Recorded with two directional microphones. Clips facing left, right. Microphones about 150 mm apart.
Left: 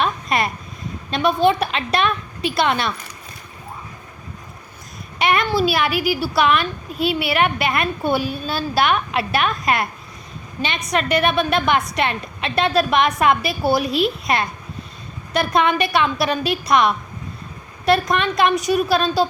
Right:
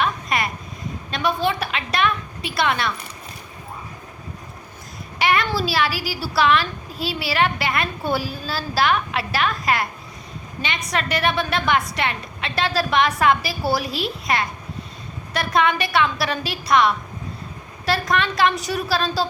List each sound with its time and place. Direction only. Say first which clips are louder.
0.0 s a sound: left 2 dB; 25° left (ahead or behind)
1.1 s a child's voice: left 5 dB; 20° left (ahead or behind)
5.2 s a child's voice: left 3 dB; 20° left (ahead or behind)
11.2 s a child's voice: left 4 dB; 20° left (ahead or behind)